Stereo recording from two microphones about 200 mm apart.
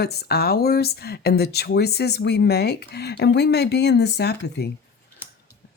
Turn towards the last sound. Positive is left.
turn(degrees=55)  # may be behind; listen again after turning